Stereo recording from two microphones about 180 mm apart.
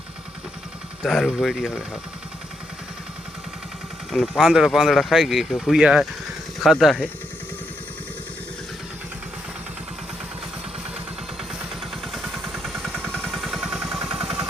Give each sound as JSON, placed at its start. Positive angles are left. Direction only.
{"t": 1.0, "sound": "speech", "side_deg": 0}
{"t": 4.1, "sound": "speech", "side_deg": 0}
{"t": 12.1, "sound": "vehicle", "side_deg": 0}